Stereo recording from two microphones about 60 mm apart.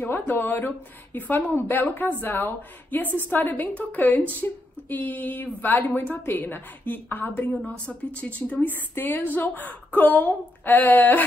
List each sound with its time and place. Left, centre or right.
0.0 s a woman's voice: left